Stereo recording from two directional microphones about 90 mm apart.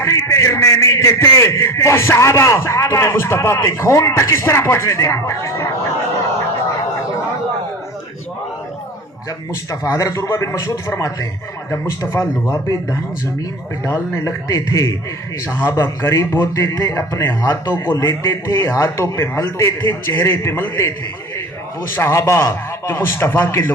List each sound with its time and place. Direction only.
0.0 s a man's voice: 35° left (ahead or behind)
9.8 s a man's voice: 40° left (ahead or behind)